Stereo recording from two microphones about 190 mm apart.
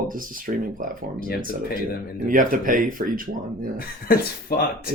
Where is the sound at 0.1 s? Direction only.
45° right (ahead or behind).